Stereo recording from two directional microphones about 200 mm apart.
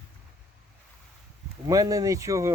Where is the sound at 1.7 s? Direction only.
15° right (ahead or behind).